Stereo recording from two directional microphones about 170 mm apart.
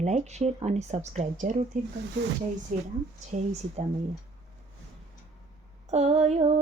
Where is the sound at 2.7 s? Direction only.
50° right (ahead or behind).